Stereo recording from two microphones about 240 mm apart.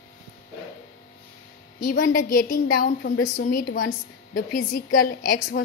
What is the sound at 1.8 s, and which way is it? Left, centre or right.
A woman's voice, left.